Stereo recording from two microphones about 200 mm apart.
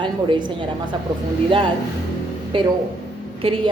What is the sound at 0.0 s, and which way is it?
Speech, 25° right (ahead or behind).